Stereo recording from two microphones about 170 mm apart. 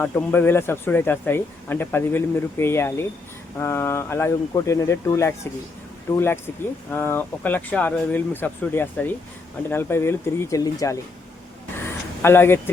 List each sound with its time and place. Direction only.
0.0 s speech: 10° left (ahead or behind)
12.2 s speech: 15° left (ahead or behind)